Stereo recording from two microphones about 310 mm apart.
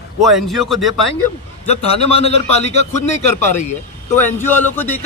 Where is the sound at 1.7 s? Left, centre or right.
Centre.